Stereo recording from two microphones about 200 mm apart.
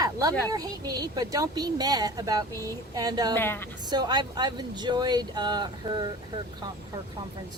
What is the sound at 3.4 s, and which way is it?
Speech, 10° left (ahead or behind).